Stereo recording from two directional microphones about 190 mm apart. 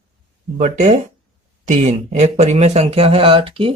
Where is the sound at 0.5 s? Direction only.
40° right (ahead or behind).